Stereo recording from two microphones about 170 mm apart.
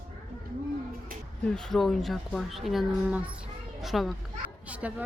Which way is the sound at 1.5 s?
Centre (ahead or behind).